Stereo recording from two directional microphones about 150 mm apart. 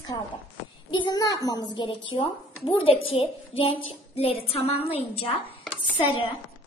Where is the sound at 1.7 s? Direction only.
30° left (ahead or behind).